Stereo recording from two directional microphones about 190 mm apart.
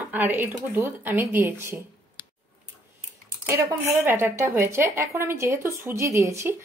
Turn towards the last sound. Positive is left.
turn(degrees=-15)  # may be behind; listen again after turning